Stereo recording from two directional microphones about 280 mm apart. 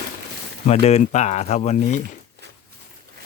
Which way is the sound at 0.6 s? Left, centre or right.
Left.